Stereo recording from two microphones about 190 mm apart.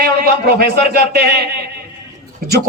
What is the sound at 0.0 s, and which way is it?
A man's voice, 50° right (ahead or behind).